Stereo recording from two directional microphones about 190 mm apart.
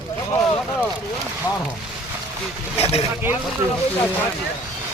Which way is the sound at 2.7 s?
30° left (ahead or behind).